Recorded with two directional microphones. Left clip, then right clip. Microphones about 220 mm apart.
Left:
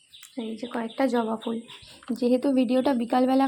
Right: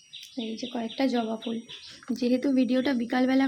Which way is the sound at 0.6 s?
Centre (ahead or behind).